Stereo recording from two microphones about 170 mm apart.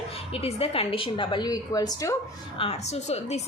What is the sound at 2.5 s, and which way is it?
Speech, 35° left (ahead or behind).